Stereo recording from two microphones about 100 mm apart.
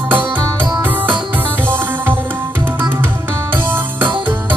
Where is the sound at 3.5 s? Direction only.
20° right (ahead or behind).